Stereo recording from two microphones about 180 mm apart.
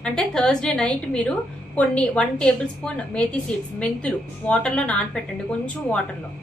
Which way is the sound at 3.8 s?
5° left (ahead or behind).